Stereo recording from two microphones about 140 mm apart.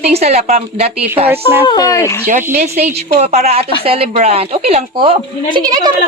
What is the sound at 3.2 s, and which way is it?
A woman's voice, 50° right (ahead or behind).